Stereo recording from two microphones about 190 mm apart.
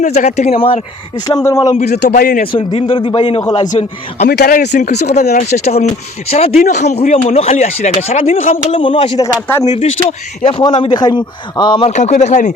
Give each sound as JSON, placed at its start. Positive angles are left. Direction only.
{"t": 0.0, "sound": "speech", "side_deg": 40}
{"t": 1.9, "sound": "a man's voice", "side_deg": 60}
{"t": 2.5, "sound": "speech", "side_deg": 25}
{"t": 3.7, "sound": "speech", "side_deg": 35}
{"t": 4.3, "sound": "speech", "side_deg": 55}
{"t": 4.9, "sound": "speech", "side_deg": 35}
{"t": 9.7, "sound": "speech", "side_deg": 35}
{"t": 11.9, "sound": "speech", "side_deg": 40}